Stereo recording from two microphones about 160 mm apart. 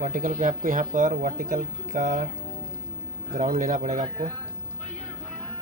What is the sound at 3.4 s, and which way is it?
Speech, 55° right (ahead or behind).